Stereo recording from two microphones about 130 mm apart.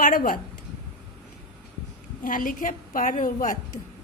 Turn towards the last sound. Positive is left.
turn(degrees=90)